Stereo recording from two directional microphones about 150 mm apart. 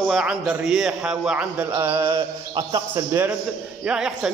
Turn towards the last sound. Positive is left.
turn(degrees=-5)  # may be behind; listen again after turning